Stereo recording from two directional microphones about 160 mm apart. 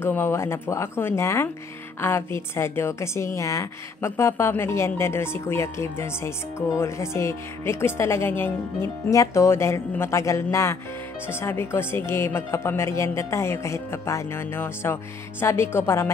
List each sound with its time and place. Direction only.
0.0 s a woman's voice: 15° left (ahead or behind)